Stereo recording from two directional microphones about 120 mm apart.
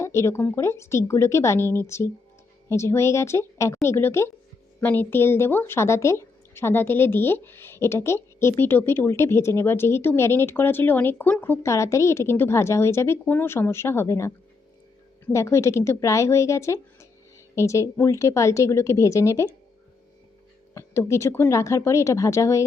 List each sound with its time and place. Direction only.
0.0 s a woman's voice: 25° left (ahead or behind)
20.7 s a woman's voice: 25° left (ahead or behind)